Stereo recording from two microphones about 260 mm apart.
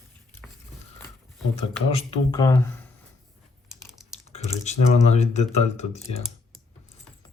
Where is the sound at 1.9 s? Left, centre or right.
Left.